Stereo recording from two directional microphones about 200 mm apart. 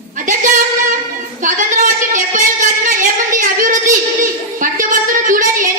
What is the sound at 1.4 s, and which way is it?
A woman's voice, 40° right (ahead or behind).